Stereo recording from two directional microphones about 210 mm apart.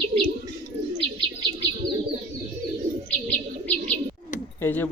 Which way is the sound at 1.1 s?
20° right (ahead or behind).